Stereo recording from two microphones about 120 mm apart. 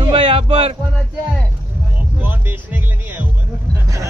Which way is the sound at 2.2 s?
15° right (ahead or behind).